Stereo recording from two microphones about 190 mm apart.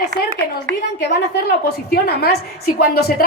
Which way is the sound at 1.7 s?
55° left (ahead or behind).